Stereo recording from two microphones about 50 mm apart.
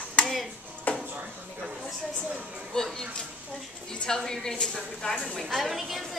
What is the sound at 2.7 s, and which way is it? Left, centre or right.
A woman's voice, centre.